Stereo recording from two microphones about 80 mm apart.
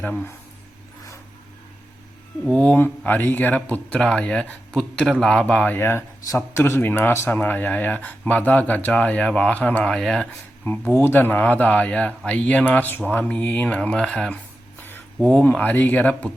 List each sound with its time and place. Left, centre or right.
0.0 s speech: centre
2.6 s speech: left
5.7 s a man's voice: left
7.3 s speech: left
10.9 s speech: left; by 14.3 s centre
14.8 s a sound: left
15.3 s speech: centre